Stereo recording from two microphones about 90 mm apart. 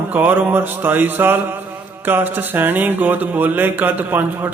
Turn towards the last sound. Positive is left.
turn(degrees=-20)  # may be behind; listen again after turning